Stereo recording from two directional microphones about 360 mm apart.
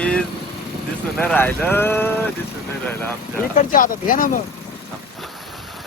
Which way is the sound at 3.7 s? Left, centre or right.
Left.